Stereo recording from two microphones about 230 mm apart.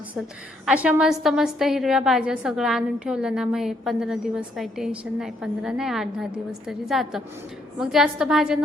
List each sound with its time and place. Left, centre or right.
0.6 s a woman's voice: centre